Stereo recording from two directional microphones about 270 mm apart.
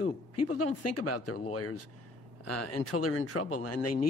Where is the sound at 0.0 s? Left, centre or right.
Left.